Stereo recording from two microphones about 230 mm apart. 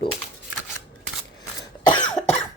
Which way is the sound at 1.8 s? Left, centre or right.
Centre.